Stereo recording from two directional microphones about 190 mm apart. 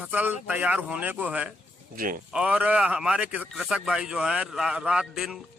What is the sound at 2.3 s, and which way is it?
A man's voice, 5° right (ahead or behind).